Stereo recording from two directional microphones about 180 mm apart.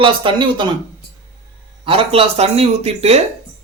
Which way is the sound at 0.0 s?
25° right (ahead or behind).